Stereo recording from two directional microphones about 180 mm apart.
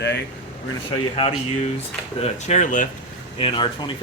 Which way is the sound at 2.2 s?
40° left (ahead or behind).